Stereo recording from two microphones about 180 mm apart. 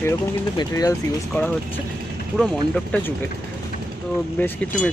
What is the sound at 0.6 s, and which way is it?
Speech, 20° left (ahead or behind).